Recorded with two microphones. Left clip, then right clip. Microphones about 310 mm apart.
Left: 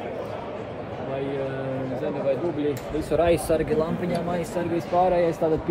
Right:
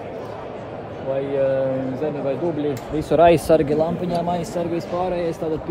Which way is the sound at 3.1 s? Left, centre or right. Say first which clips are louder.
Right 7 dB; right.